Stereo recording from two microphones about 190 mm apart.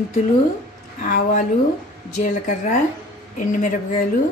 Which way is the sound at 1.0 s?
45° left (ahead or behind).